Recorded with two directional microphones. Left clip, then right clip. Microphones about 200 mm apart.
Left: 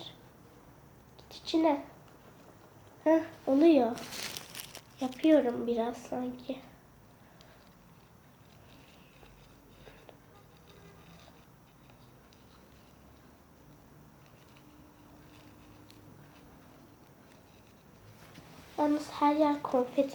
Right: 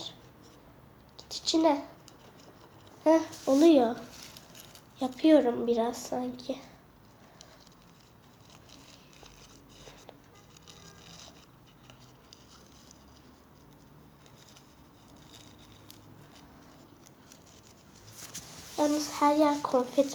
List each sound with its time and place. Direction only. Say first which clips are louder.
1.1 s a sound: right 3 dB; 20° right (ahead or behind)
3.0 s a child's voice: right 3 dB; 20° right (ahead or behind)
3.4 s a woman's voice: right 2 dB; 10° right (ahead or behind)
4.9 s a woman's voice: right 3 dB; 15° right (ahead or behind)
18.3 s a sound: right 10 dB; 55° right (ahead or behind)
18.8 s speech: right 2 dB; 25° right (ahead or behind)